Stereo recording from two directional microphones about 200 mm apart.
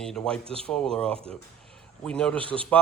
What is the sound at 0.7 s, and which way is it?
Speech, 5° left (ahead or behind).